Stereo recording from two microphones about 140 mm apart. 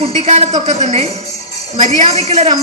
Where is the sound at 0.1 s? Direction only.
50° right (ahead or behind).